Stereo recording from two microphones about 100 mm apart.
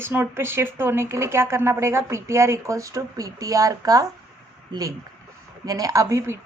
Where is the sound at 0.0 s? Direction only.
25° right (ahead or behind).